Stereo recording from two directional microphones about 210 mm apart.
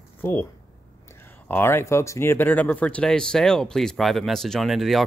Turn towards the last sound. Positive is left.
turn(degrees=0)  # may be behind; listen again after turning